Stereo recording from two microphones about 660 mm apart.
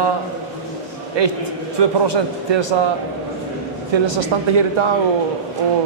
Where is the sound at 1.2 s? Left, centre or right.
Right.